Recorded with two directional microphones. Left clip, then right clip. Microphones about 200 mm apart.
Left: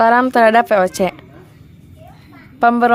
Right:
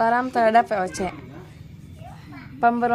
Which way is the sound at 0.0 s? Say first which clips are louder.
Left 8 dB; 45° left (ahead or behind).